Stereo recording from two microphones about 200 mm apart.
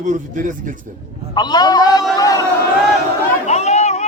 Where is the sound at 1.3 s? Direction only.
20° left (ahead or behind).